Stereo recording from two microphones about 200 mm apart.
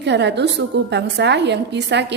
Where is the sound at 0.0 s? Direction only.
60° right (ahead or behind).